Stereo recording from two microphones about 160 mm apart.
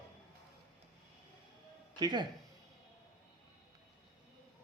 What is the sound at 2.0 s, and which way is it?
Speech, 25° right (ahead or behind).